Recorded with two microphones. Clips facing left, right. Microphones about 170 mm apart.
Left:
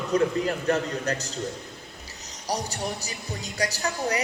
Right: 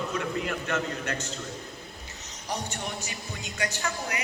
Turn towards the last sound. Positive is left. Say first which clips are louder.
# left 5 dB
turn(degrees=35)  # may be behind; listen again after turning